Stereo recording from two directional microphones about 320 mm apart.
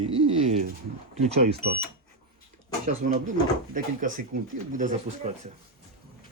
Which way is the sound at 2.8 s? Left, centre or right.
Right.